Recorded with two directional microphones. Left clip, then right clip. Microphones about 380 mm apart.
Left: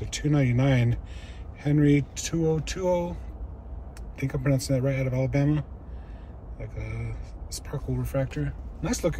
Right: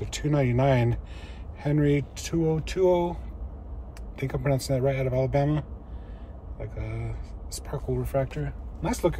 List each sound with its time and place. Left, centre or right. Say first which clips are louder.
0.0 s speech: even; centre
4.2 s speech: right 1 dB; centre